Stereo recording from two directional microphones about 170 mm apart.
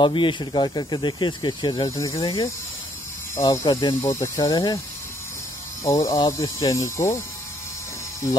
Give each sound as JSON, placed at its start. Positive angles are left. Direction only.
{"t": 0.0, "sound": "speech", "side_deg": 30}
{"t": 5.9, "sound": "speech", "side_deg": 20}